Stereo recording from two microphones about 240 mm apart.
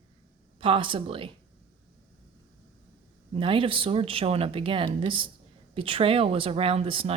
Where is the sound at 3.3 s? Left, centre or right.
Right.